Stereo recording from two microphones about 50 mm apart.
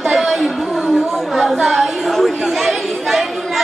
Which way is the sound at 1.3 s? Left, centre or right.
Centre.